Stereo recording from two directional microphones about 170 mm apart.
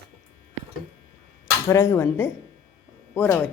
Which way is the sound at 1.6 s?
15° left (ahead or behind).